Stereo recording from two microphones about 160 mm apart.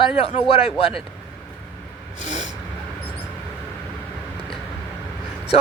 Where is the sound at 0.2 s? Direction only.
40° left (ahead or behind).